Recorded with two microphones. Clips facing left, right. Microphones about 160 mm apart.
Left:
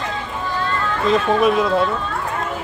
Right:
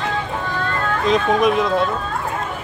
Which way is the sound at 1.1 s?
5° left (ahead or behind).